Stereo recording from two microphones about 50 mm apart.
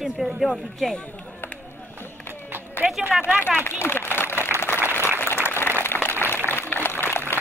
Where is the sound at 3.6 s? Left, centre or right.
Left.